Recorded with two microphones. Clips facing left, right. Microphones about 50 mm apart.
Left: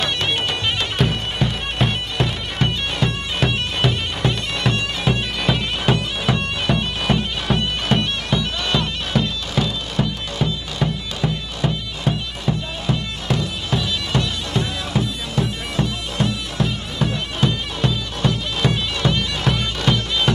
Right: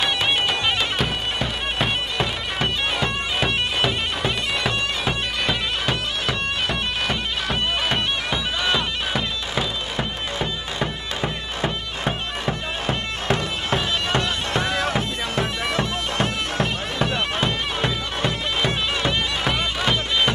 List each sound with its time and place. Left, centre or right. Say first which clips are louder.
0.0 s bagpipes: right 1 dB; centre
7.5 s bagpipes: left 3 dB; centre
9.6 s music: left 4 dB; right